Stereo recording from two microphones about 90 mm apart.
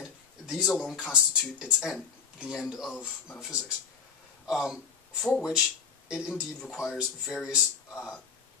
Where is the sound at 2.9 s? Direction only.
20° left (ahead or behind).